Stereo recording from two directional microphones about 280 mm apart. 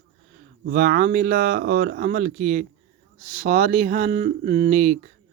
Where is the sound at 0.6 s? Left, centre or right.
Right.